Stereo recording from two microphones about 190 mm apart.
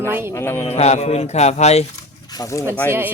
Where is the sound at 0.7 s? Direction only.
35° left (ahead or behind).